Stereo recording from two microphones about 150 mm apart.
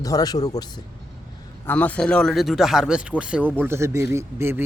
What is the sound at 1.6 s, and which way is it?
Speech, 10° left (ahead or behind).